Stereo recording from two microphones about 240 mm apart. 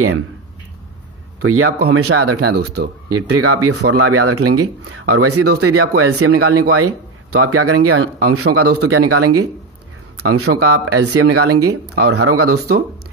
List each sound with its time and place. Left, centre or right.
1.4 s speech: right
2.5 s speech: right
3.1 s speech: right